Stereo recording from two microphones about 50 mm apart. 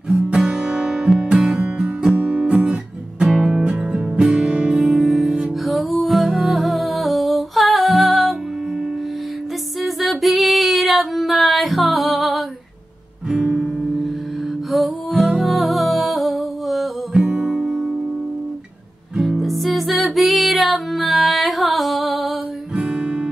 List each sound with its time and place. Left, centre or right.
0.5 s music: centre
9.8 s female singing: centre
13.3 s guitar: centre
13.6 s music: centre
17.1 s music: centre
19.1 s music: centre
22.8 s guitar: centre